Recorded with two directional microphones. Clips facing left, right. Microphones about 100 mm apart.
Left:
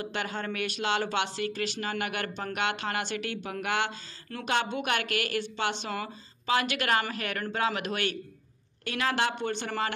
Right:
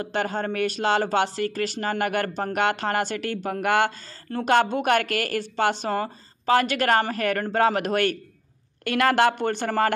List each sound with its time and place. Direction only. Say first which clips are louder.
0.0 s speech: right 7 dB; 40° right (ahead or behind)
8.8 s speech: right 9 dB; 60° right (ahead or behind)